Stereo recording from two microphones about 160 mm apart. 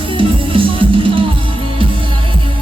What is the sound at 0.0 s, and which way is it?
Music, 30° right (ahead or behind).